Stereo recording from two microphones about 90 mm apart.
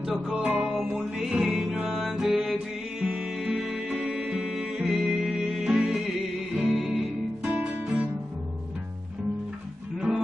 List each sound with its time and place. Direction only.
0.0 s music: 5° right (ahead or behind)
7.5 s music: 15° right (ahead or behind)
9.9 s music: 5° right (ahead or behind)